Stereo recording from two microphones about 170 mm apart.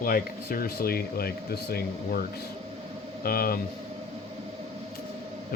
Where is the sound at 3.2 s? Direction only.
60° left (ahead or behind).